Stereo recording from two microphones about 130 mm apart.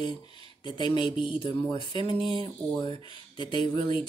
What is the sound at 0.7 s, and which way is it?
Speech, 40° left (ahead or behind).